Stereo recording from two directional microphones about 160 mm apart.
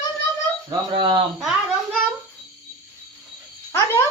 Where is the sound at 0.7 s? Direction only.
30° right (ahead or behind).